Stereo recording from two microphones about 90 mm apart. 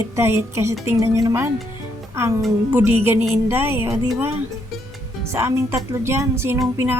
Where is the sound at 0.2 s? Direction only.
30° right (ahead or behind).